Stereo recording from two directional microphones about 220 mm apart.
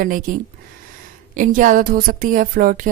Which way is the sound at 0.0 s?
40° right (ahead or behind).